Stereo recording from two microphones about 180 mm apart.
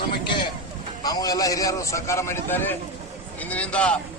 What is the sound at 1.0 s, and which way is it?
A man's voice, 20° left (ahead or behind).